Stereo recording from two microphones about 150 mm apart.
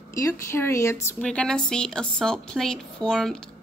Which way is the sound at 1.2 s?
5° left (ahead or behind).